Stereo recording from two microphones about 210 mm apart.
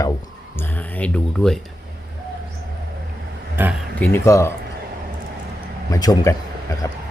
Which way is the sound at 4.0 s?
10° left (ahead or behind).